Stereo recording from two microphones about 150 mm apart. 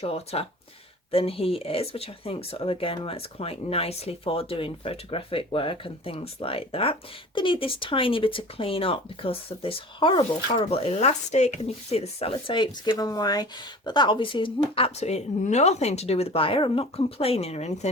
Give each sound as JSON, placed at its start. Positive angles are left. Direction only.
{"t": 0.0, "sound": "speech", "side_deg": 40}